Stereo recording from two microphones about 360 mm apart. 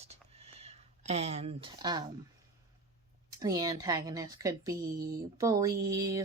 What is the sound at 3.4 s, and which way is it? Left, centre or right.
A woman's voice, centre.